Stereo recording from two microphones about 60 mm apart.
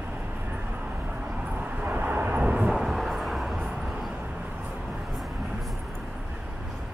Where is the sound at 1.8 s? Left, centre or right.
Right.